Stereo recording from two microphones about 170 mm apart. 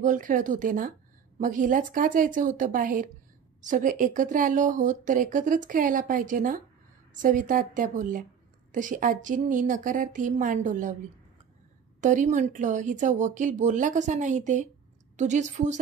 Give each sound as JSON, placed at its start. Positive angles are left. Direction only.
{"t": 0.0, "sound": "speech", "side_deg": -50}
{"t": 12.0, "sound": "speech", "side_deg": -45}